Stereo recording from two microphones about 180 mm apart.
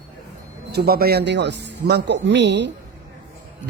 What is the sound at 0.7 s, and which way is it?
Speech, 60° right (ahead or behind).